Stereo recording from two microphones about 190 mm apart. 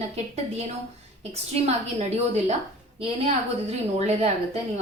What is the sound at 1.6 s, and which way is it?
Speech, 35° right (ahead or behind).